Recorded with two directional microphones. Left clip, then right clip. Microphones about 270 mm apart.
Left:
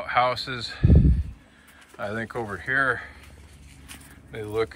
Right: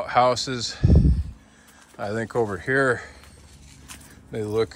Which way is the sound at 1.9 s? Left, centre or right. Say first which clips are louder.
Right 5 dB; centre.